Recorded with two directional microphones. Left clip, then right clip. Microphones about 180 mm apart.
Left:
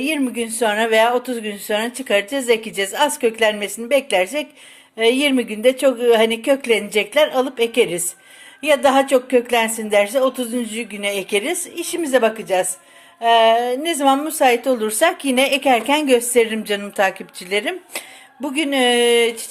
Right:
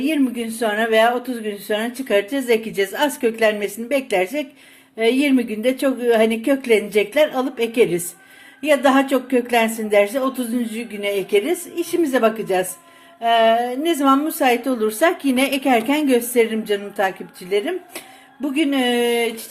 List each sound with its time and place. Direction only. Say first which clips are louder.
0.0 s a woman's voice: even; 40° left (ahead or behind)